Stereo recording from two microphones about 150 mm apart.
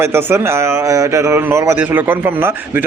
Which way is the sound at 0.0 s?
15° right (ahead or behind).